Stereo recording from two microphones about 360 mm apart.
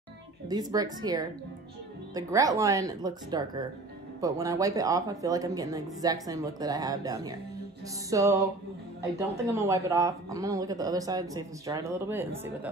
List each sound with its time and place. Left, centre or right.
0.5 s speech: centre